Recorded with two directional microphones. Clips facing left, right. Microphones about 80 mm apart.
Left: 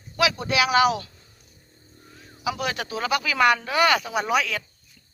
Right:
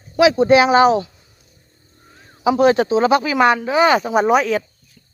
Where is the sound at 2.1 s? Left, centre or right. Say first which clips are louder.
Right 11 dB; right.